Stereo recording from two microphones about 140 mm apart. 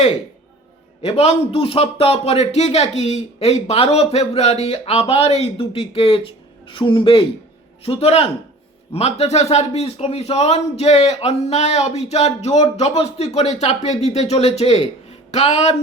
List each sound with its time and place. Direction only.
1.0 s a man's voice: 45° left (ahead or behind)